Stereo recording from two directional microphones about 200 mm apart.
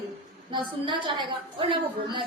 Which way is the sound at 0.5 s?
25° right (ahead or behind).